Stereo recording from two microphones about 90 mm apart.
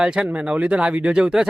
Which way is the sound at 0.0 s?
10° right (ahead or behind).